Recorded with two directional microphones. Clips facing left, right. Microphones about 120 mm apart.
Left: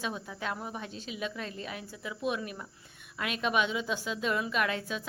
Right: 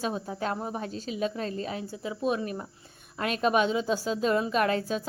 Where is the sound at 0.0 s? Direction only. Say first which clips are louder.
Right 6 dB; 40° right (ahead or behind).